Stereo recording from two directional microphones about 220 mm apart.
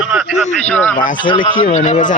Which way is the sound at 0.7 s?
10° left (ahead or behind).